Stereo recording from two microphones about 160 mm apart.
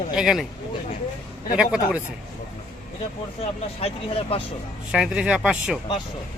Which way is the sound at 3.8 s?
35° left (ahead or behind).